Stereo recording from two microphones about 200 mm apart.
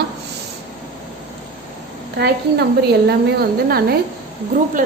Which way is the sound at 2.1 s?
55° right (ahead or behind).